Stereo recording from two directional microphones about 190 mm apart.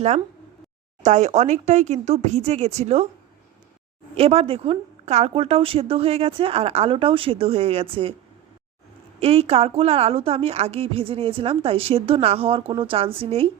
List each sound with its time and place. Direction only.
1.0 s a woman's voice: 40° right (ahead or behind)
4.1 s a woman's voice: 30° right (ahead or behind)
9.2 s a woman's voice: 30° right (ahead or behind)